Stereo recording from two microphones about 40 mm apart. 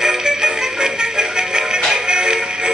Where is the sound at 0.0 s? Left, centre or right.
Centre.